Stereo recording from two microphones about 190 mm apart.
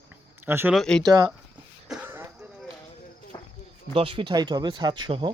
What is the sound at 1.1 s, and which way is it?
Speech, 20° right (ahead or behind).